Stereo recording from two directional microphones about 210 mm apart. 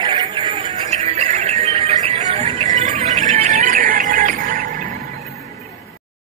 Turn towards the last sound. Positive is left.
turn(degrees=-40)  # may be behind; listen again after turning